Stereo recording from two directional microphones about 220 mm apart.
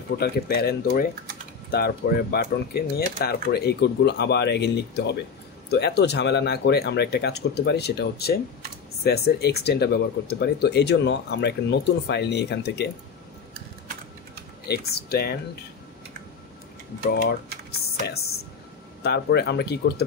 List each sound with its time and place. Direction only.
0.2 s speech: 45° left (ahead or behind)
14.7 s speech: 45° left (ahead or behind)
17.1 s speech: 45° left (ahead or behind)